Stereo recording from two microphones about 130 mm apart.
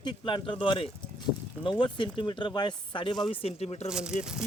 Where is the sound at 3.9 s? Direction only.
5° right (ahead or behind).